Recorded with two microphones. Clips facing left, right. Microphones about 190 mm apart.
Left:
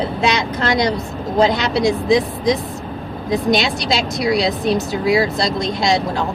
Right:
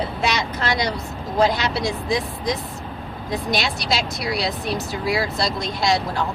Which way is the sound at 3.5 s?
5° right (ahead or behind).